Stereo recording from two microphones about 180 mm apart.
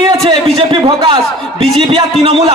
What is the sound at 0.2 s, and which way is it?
Speech, 25° right (ahead or behind).